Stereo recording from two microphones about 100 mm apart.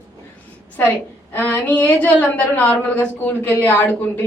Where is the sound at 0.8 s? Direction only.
20° left (ahead or behind).